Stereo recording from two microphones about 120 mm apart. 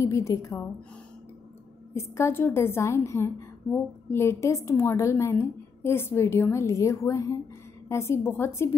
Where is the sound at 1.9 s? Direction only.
25° left (ahead or behind).